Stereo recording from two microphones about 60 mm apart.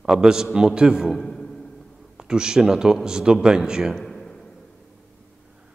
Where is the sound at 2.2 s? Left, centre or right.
Centre.